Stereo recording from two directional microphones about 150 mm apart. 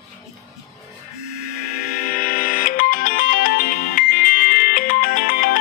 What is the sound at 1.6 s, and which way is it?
Music, 75° left (ahead or behind).